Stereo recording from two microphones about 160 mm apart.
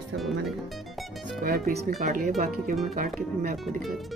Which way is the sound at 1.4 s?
65° right (ahead or behind).